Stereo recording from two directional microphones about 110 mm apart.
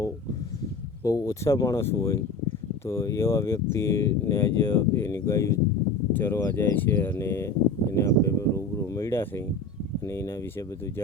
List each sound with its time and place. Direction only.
1.0 s speech: 30° left (ahead or behind)